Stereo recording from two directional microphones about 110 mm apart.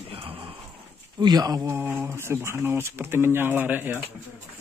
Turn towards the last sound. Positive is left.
turn(degrees=-20)  # may be behind; listen again after turning